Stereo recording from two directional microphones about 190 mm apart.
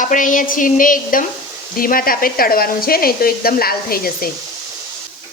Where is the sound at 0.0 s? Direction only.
45° left (ahead or behind).